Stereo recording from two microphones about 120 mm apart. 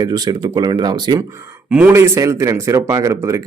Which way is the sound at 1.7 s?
15° right (ahead or behind).